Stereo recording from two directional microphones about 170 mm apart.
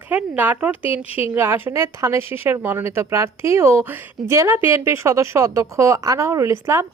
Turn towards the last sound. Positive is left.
turn(degrees=-15)  # may be behind; listen again after turning